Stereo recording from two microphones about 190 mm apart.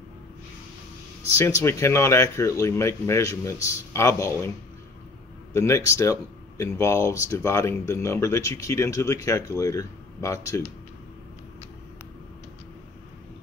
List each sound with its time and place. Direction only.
1.4 s speech: 15° left (ahead or behind)
5.5 s speech: 15° left (ahead or behind)